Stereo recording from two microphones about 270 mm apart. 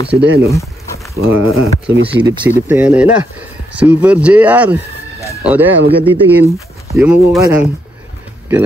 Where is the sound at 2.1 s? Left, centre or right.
Centre.